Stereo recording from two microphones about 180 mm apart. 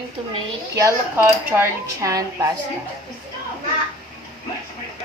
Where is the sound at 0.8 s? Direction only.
15° right (ahead or behind).